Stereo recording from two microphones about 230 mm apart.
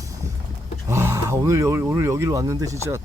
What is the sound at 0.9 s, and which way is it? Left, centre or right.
Speech, centre.